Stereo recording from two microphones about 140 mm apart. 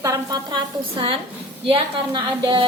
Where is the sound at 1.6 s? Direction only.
40° right (ahead or behind).